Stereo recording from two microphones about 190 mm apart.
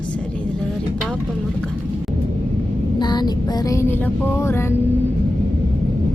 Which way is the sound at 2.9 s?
20° left (ahead or behind).